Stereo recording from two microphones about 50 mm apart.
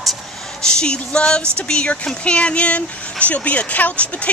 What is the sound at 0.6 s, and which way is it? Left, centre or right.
Speech, centre.